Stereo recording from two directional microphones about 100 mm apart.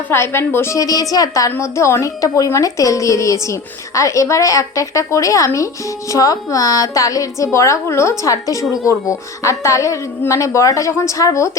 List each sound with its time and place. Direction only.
0.1 s a woman's voice: 25° left (ahead or behind)